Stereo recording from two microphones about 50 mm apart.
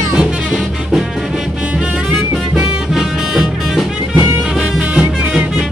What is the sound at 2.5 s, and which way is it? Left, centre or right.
Music, centre.